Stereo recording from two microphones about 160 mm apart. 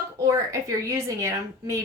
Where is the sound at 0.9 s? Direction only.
20° right (ahead or behind).